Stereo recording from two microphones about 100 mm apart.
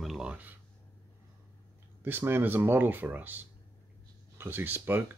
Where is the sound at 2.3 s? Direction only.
20° right (ahead or behind).